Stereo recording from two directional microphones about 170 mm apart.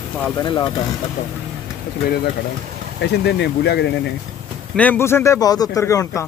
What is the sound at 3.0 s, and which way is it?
Speech, 80° left.